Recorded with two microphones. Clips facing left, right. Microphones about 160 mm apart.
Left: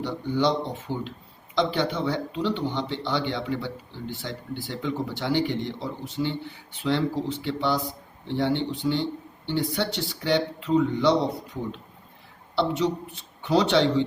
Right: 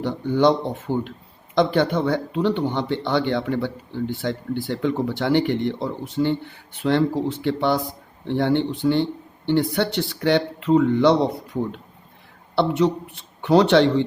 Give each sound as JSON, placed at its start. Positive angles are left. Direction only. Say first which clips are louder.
{"t": 0.0, "sound": "speech", "louder": "right 6 dB", "side_deg": -55}
{"t": 12.5, "sound": "speech", "louder": "right 5 dB", "side_deg": -55}